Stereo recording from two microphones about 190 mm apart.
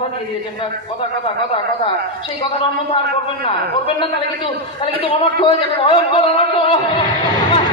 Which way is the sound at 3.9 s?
25° left (ahead or behind).